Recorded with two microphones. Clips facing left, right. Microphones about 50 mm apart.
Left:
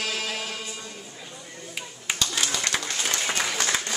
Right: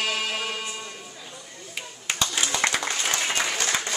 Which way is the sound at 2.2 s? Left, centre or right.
Right.